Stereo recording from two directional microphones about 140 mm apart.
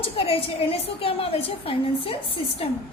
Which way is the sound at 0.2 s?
40° left (ahead or behind).